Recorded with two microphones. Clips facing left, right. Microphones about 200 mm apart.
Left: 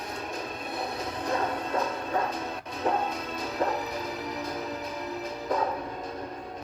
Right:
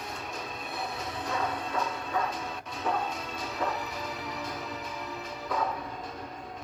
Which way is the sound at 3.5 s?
35° left (ahead or behind).